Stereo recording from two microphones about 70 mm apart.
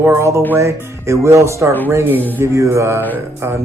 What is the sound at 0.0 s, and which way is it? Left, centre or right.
Mantra, right.